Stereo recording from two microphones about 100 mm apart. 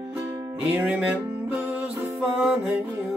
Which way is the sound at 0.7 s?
15° right (ahead or behind).